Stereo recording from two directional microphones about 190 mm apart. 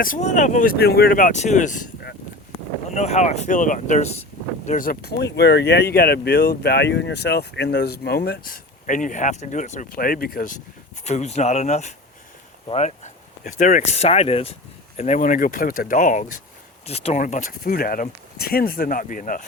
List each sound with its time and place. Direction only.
0.0 s speech: 40° left (ahead or behind)
0.8 s speech: 55° left (ahead or behind)
2.9 s speech: 35° left (ahead or behind)
11.0 s speech: 35° left (ahead or behind)
13.4 s speech: 45° left (ahead or behind)